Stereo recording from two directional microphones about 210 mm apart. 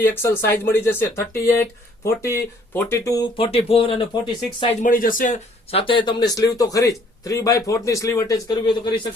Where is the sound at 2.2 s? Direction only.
10° left (ahead or behind).